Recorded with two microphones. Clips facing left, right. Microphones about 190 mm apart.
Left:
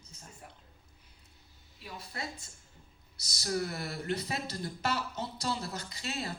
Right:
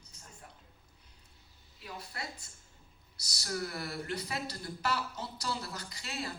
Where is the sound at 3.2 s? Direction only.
20° left (ahead or behind).